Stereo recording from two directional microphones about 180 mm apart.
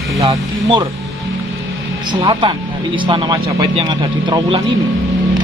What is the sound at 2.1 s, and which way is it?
Speech, 25° right (ahead or behind).